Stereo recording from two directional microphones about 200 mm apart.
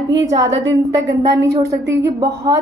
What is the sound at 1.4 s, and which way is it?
Speech, 15° right (ahead or behind).